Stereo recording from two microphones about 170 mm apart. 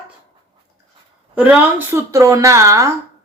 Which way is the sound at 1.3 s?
10° right (ahead or behind).